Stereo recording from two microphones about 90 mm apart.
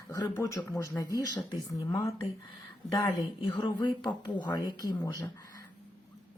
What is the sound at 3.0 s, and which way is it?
Speech, 45° left (ahead or behind).